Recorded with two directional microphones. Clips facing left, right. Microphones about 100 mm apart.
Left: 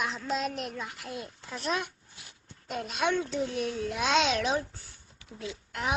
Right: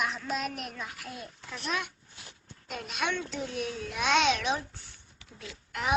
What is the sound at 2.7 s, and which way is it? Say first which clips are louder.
Speech: left 4 dB; 30° left (ahead or behind).